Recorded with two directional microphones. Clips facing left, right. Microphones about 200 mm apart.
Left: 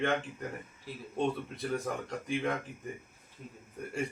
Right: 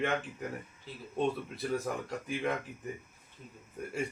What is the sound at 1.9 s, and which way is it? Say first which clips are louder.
Speech: even; 5° right (ahead or behind).